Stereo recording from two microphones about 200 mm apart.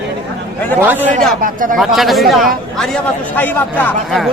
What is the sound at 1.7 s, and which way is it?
Speech, centre (ahead or behind).